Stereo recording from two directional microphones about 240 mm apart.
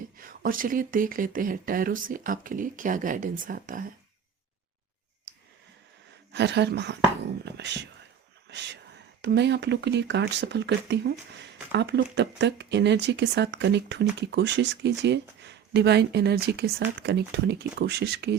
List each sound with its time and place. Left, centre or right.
0.2 s speech: right
6.3 s speech: right